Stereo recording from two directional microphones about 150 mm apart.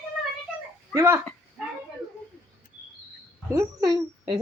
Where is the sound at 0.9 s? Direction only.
20° right (ahead or behind).